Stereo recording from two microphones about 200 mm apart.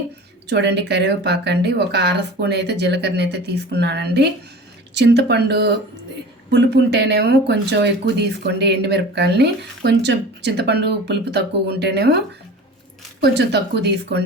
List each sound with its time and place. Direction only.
0.5 s speech: 60° right (ahead or behind)
13.2 s speech: 55° right (ahead or behind)